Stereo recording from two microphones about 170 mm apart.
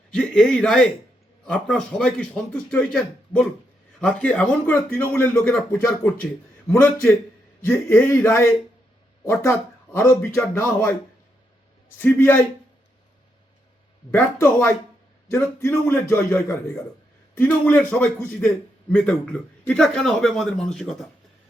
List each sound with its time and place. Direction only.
0.1 s a man's voice: 5° left (ahead or behind)
6.7 s speech: 10° left (ahead or behind)
11.9 s speech: 10° left (ahead or behind)
14.1 s a man's voice: 15° left (ahead or behind)